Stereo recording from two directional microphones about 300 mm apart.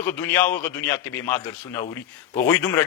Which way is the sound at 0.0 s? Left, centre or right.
Centre.